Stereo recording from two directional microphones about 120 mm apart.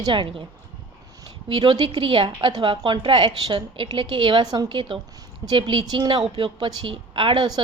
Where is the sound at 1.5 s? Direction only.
45° right (ahead or behind).